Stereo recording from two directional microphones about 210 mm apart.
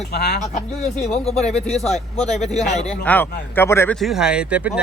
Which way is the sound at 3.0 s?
10° left (ahead or behind).